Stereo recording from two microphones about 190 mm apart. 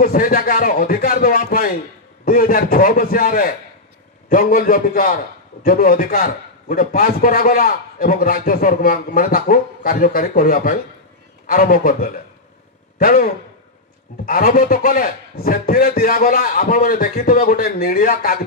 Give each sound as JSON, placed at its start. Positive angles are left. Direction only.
{"t": 0.0, "sound": "a man's voice", "side_deg": 50}